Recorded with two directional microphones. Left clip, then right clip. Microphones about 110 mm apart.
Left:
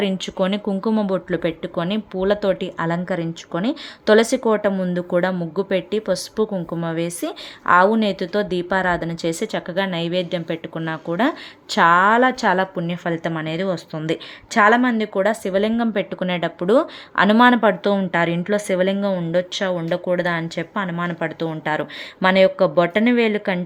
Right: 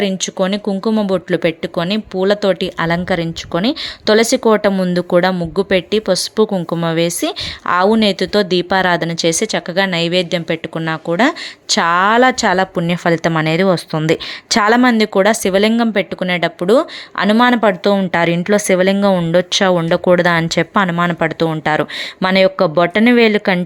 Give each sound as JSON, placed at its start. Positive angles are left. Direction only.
{"t": 0.0, "sound": "speech", "side_deg": -20}
{"t": 12.7, "sound": "speech", "side_deg": -40}
{"t": 18.1, "sound": "speech", "side_deg": -35}
{"t": 19.3, "sound": "speech", "side_deg": -50}